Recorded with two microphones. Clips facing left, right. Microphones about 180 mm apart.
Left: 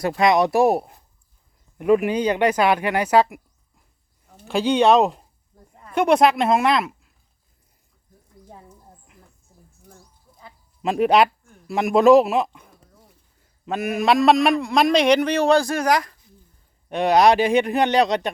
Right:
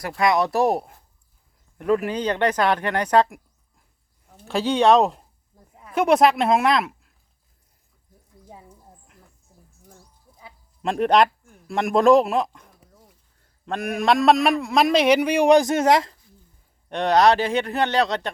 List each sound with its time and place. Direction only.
0.0 s a man's voice: 20° left (ahead or behind); by 7.1 s centre (ahead or behind)
9.0 s music: centre (ahead or behind)
10.8 s a man's voice: 5° left (ahead or behind); by 16.1 s 25° right (ahead or behind)
16.9 s speech: 10° left (ahead or behind)